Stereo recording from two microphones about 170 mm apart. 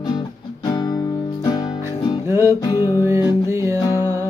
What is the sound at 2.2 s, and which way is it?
Music, 15° right (ahead or behind).